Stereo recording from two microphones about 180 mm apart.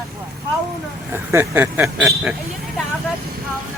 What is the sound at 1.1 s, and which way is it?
Speech, 15° right (ahead or behind).